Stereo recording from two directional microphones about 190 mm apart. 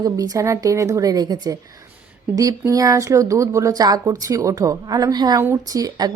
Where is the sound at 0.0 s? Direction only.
20° right (ahead or behind).